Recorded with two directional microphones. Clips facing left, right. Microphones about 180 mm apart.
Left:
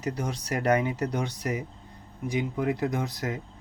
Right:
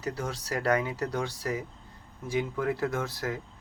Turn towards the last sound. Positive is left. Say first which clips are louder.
# left 1 dB
turn(degrees=20)  # may be behind; listen again after turning